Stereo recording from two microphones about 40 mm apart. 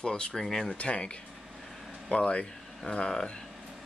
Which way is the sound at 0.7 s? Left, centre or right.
Left.